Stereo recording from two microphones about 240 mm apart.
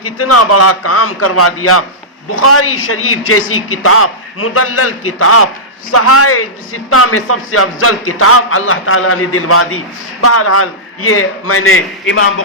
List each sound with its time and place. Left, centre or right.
0.0 s a man's voice: left